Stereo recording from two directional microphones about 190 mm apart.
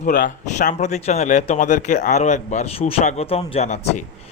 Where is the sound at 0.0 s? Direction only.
45° left (ahead or behind).